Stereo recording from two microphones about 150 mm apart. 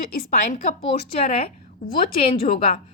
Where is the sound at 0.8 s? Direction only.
40° left (ahead or behind).